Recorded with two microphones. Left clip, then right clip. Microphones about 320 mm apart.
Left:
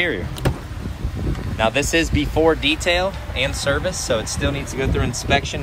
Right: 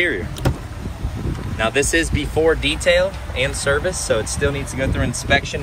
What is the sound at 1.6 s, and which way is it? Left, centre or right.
Speech, centre.